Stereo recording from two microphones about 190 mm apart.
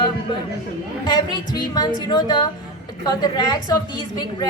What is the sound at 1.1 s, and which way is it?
A woman's voice, 20° left (ahead or behind).